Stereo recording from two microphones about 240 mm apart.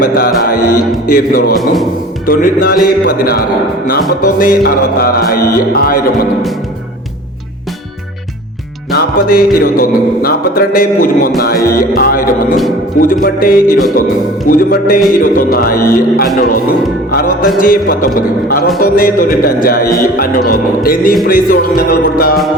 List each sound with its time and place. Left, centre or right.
0.0 s music: left
1.5 s music: centre
2.2 s music: left
9.0 s music: left